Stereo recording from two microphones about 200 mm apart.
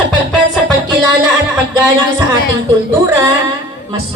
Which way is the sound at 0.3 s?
Centre (ahead or behind).